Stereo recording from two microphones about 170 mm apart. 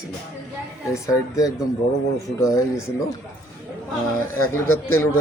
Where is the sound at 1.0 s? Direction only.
20° left (ahead or behind).